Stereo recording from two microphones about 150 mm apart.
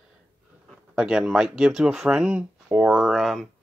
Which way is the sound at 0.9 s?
5° right (ahead or behind).